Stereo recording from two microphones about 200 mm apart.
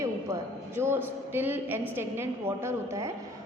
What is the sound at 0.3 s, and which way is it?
A man's voice, 15° right (ahead or behind).